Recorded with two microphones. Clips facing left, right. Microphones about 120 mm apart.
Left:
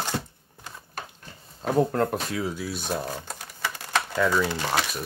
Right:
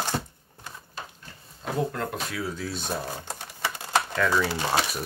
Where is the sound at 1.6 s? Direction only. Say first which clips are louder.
Left 6 dB; 40° left (ahead or behind).